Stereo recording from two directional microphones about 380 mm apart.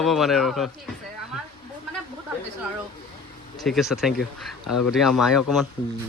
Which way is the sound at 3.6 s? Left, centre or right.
Centre.